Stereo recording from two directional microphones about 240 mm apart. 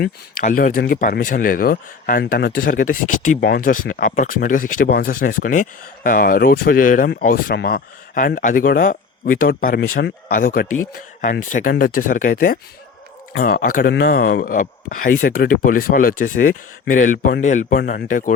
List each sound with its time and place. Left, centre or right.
0.0 s speech: left